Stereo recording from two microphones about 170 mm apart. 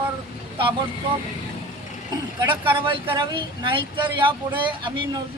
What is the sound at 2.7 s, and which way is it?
Speech, 30° right (ahead or behind).